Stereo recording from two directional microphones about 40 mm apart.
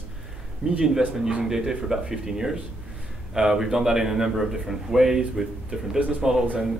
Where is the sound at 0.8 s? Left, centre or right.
Centre.